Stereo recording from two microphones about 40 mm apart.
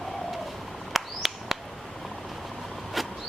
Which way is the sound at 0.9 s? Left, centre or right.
Centre.